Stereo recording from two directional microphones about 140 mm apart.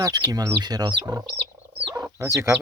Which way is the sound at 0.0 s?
25° right (ahead or behind).